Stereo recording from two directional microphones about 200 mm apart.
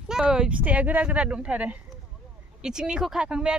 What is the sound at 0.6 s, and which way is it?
Speech, 10° right (ahead or behind).